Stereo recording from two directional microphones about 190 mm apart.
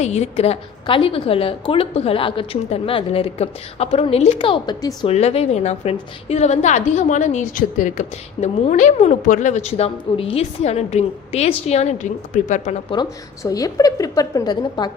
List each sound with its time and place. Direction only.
0.0 s a woman's voice: 35° left (ahead or behind)
5.0 s a woman's voice: 35° left (ahead or behind)
12.9 s a woman's voice: 20° left (ahead or behind)